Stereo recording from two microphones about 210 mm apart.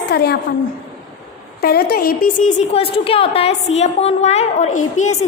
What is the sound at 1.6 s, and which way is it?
A woman's voice, 45° left (ahead or behind).